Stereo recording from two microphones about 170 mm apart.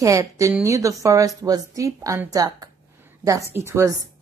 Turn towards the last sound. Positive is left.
turn(degrees=-15)  # may be behind; listen again after turning